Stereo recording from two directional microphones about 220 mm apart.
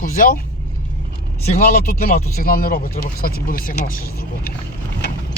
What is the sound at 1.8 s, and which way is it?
Speech, 40° left (ahead or behind).